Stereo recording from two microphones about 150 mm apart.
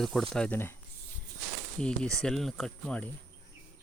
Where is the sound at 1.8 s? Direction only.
5° left (ahead or behind).